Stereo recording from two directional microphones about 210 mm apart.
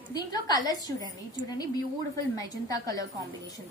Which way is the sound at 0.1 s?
20° left (ahead or behind).